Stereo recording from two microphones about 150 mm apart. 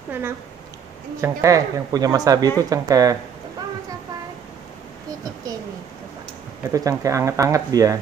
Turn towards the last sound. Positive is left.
turn(degrees=-25)  # may be behind; listen again after turning